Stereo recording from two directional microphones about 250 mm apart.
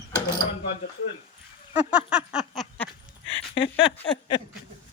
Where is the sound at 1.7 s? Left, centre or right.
Centre.